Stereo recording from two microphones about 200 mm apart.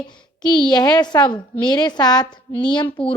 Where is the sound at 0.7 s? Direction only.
20° left (ahead or behind).